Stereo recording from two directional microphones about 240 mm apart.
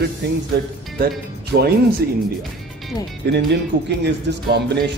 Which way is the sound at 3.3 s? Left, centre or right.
Right.